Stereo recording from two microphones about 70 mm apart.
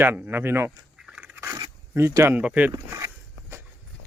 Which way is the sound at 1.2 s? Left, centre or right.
Right.